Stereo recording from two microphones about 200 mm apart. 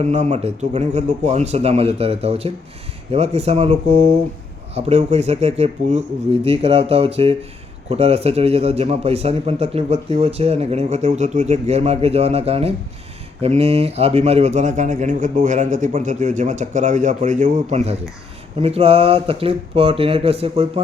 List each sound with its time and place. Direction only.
0.0 s a man's voice: 35° right (ahead or behind)